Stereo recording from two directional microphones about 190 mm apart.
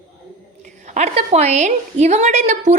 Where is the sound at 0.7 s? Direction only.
40° right (ahead or behind).